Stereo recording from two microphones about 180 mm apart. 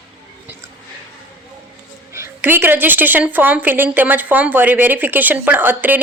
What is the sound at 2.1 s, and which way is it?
A woman's voice, 15° right (ahead or behind).